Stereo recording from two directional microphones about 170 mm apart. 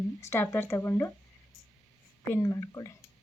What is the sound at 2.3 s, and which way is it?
Speech, 20° left (ahead or behind).